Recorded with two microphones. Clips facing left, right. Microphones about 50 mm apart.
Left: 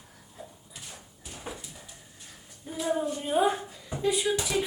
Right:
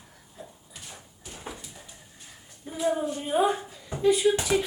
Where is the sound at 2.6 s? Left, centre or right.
Centre.